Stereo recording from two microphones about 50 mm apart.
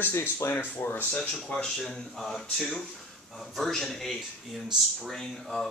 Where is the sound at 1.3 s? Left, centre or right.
Centre.